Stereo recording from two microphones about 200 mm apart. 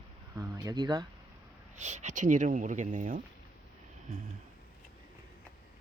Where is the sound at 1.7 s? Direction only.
35° right (ahead or behind).